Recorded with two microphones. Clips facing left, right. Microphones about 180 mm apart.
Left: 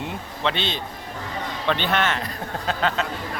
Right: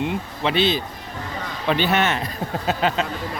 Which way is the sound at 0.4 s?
5° right (ahead or behind).